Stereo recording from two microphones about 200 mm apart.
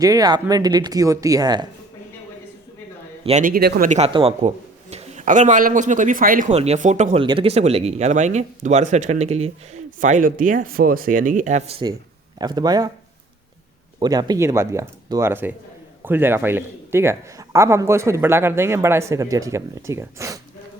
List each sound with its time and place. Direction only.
0.0 s speech: 20° right (ahead or behind)
3.2 s a man's voice: 40° right (ahead or behind)
3.8 s a man's voice: 30° right (ahead or behind)
14.0 s speech: 20° right (ahead or behind)